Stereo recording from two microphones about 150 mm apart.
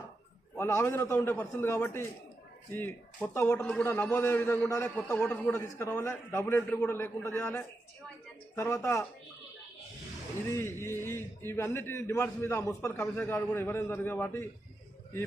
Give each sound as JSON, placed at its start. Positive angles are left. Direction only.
{"t": 0.5, "sound": "a man's voice", "side_deg": 15}
{"t": 10.5, "sound": "a man's voice", "side_deg": 15}